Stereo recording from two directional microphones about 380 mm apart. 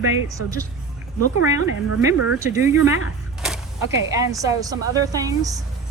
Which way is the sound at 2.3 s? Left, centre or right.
Centre.